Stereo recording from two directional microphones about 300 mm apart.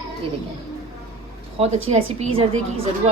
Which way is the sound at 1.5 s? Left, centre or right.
Centre.